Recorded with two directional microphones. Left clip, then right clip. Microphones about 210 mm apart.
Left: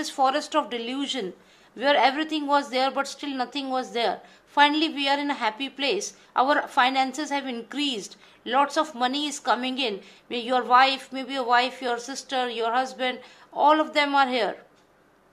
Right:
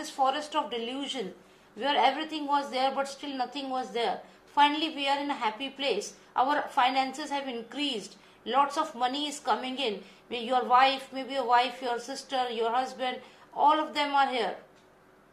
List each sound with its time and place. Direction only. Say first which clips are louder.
0.0 s a woman's voice: left 5 dB; 45° left (ahead or behind)